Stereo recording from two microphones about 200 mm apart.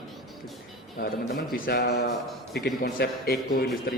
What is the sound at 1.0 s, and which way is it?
A man's voice, 50° left (ahead or behind).